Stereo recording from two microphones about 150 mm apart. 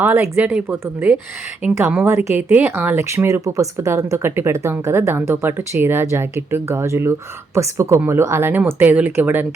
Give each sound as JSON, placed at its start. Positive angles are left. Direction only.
{"t": 0.0, "sound": "speech", "side_deg": -15}